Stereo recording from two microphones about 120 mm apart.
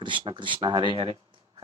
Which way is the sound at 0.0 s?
40° right (ahead or behind).